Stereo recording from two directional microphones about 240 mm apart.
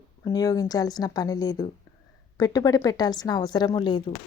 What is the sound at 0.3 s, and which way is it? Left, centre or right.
Speech, centre.